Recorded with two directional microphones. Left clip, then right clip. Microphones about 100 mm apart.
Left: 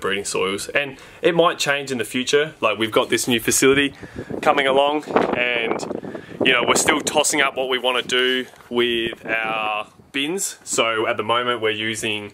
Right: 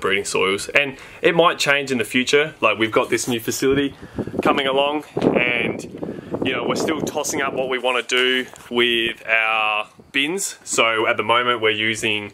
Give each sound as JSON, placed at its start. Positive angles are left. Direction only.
{"t": 0.0, "sound": "speech", "side_deg": 0}
{"t": 3.4, "sound": "speech", "side_deg": 50}
{"t": 4.4, "sound": "speech", "side_deg": 40}
{"t": 6.4, "sound": "speech", "side_deg": 60}
{"t": 7.2, "sound": "speech", "side_deg": 30}